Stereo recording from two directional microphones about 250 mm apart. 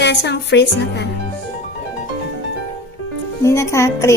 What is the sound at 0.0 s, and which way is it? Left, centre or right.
Speech, left.